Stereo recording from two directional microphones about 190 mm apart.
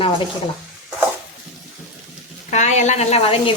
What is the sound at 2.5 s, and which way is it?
Speech, 40° left (ahead or behind).